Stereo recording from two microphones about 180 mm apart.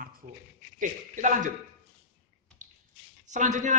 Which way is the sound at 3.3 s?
40° right (ahead or behind).